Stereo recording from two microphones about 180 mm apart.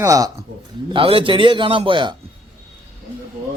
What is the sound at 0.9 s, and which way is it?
Speech, 30° right (ahead or behind).